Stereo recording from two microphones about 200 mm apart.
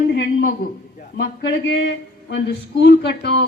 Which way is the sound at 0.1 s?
50° left (ahead or behind).